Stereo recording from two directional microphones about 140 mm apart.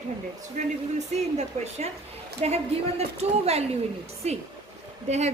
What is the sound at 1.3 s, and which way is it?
A woman's voice, 50° right (ahead or behind).